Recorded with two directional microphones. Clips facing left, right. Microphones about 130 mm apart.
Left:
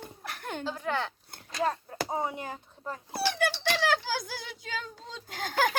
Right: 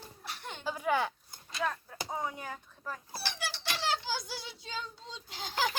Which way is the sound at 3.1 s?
60° left (ahead or behind).